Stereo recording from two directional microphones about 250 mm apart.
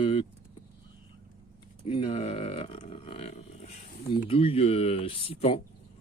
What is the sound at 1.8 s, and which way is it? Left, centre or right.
Speech, left.